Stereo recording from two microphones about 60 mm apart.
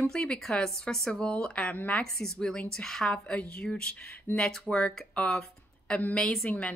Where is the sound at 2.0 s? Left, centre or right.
Centre.